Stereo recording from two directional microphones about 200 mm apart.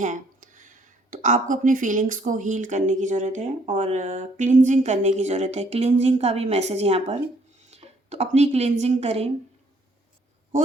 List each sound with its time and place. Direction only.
0.0 s speech: 40° right (ahead or behind)
7.6 s a sound: 35° right (ahead or behind)
8.8 s speech: 30° right (ahead or behind)